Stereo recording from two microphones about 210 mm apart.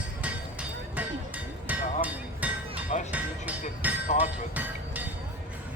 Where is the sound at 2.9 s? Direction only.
35° left (ahead or behind).